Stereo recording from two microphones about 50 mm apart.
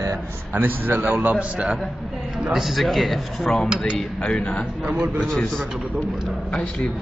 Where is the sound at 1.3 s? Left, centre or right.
Right.